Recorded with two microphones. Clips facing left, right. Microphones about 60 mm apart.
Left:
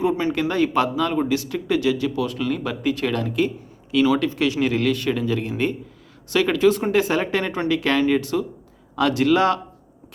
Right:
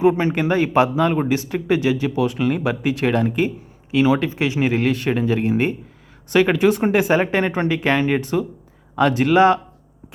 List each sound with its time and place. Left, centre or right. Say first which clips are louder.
0.0 s speech: right 4 dB; right